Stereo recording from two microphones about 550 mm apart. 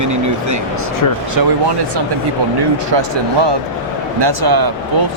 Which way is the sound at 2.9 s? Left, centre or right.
Right.